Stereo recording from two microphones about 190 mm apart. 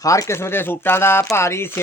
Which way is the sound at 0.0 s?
15° left (ahead or behind).